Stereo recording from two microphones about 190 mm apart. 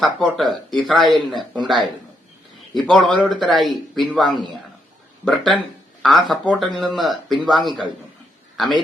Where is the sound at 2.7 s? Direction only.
Centre (ahead or behind).